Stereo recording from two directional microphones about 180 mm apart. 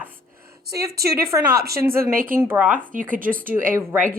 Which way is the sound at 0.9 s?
60° right (ahead or behind).